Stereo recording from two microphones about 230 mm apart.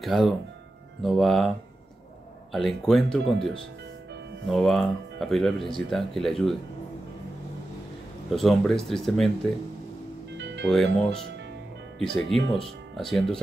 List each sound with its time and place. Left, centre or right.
0.0 s speech: centre
2.5 s speech: centre
8.3 s speech: centre
10.3 s music: right
10.7 s speech: centre